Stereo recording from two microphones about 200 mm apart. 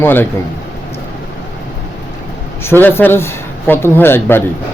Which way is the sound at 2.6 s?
10° left (ahead or behind).